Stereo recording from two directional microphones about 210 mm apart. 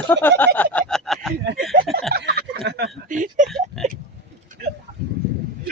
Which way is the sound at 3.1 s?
40° right (ahead or behind).